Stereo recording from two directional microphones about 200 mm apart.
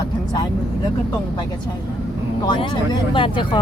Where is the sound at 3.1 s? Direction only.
25° left (ahead or behind).